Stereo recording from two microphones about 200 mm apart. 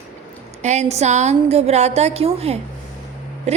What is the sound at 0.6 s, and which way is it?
A woman's voice, 35° right (ahead or behind).